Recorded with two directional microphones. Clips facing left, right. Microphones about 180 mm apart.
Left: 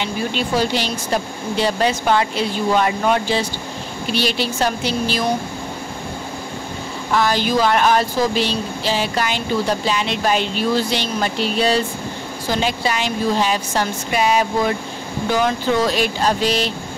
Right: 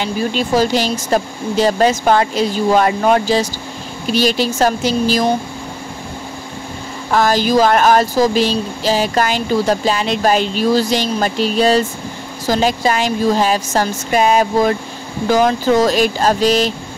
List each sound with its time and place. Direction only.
0.6 s a woman's voice: 40° right (ahead or behind)
7.1 s a woman's voice: 45° right (ahead or behind)